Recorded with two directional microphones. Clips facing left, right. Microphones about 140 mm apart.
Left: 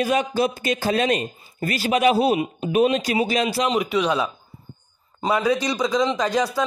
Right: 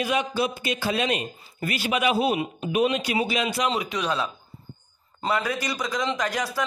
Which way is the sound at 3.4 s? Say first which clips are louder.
Left 3 dB; 30° left (ahead or behind).